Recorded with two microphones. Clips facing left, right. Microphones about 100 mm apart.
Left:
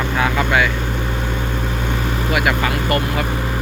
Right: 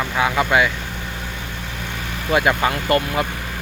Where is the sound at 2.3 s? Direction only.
25° right (ahead or behind).